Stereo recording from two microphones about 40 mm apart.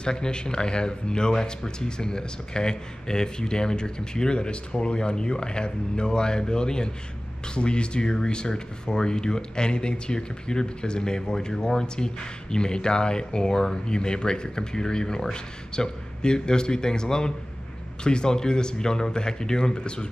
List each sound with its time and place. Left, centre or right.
0.0 s speech: left